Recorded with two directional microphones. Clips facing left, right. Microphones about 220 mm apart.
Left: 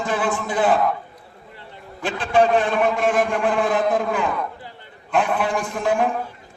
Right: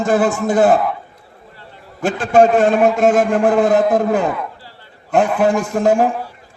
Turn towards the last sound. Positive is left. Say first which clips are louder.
# right 7 dB
turn(degrees=-45)  # may be behind; listen again after turning